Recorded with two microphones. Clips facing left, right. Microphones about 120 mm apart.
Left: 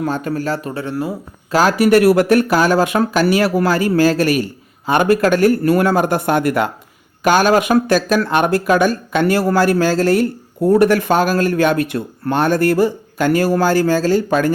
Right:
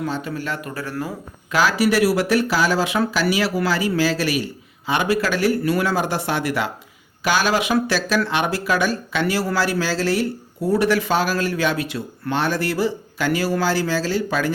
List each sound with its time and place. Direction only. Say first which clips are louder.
0.0 s speech: left 6 dB; 50° left (ahead or behind); by 0.9 s 25° left (ahead or behind)
1.5 s speech: left 5 dB; 45° left (ahead or behind)